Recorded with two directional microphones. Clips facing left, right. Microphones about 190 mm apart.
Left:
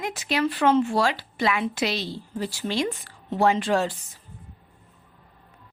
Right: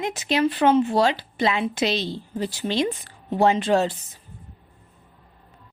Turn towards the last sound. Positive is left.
turn(degrees=-25)  # may be behind; listen again after turning